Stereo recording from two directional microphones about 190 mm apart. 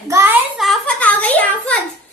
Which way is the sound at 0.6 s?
5° left (ahead or behind).